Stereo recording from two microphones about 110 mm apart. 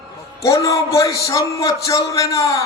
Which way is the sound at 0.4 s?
30° left (ahead or behind).